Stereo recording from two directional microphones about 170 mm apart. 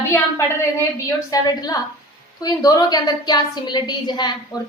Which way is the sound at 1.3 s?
20° left (ahead or behind).